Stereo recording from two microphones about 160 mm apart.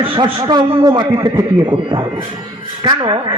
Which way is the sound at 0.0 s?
35° right (ahead or behind).